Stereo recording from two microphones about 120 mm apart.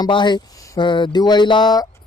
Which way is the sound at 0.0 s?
40° left (ahead or behind).